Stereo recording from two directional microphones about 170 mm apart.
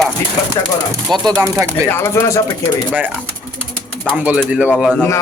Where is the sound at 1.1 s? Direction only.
25° right (ahead or behind).